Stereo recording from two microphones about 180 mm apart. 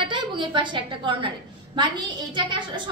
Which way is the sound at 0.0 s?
25° right (ahead or behind).